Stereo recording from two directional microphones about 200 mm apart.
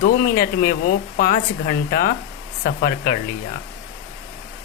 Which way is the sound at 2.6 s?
50° left (ahead or behind).